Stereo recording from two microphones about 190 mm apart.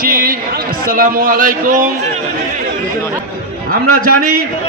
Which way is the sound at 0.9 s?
50° right (ahead or behind).